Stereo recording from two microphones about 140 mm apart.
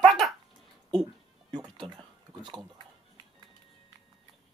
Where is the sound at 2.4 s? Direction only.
35° right (ahead or behind).